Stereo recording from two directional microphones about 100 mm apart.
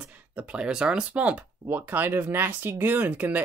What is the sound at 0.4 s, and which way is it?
Speech, 10° right (ahead or behind).